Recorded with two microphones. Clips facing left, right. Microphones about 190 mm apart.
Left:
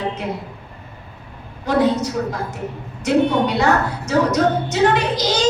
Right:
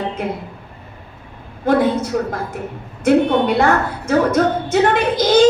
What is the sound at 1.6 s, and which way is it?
A woman's voice, 55° right (ahead or behind).